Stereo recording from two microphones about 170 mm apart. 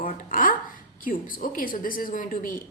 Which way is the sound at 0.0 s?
50° left (ahead or behind).